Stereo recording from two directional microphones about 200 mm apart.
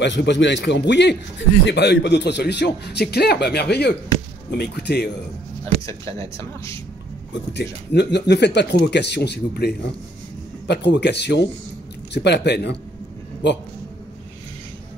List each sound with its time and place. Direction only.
0.0 s a man's voice: 60° left (ahead or behind)
6.1 s speech: 15° left (ahead or behind)
7.5 s a man's voice: 60° left (ahead or behind)